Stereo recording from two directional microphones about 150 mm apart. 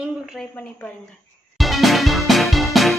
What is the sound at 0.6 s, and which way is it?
Speech, 10° left (ahead or behind).